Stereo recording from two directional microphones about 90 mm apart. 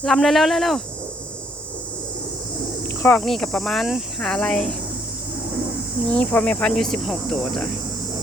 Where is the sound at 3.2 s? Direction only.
5° left (ahead or behind).